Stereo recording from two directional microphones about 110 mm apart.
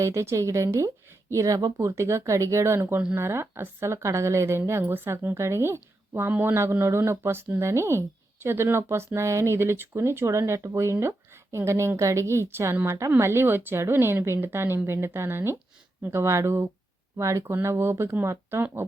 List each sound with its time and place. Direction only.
0.0 s a woman's voice: 25° right (ahead or behind)